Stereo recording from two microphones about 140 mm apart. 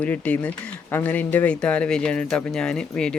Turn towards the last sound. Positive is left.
turn(degrees=5)  # may be behind; listen again after turning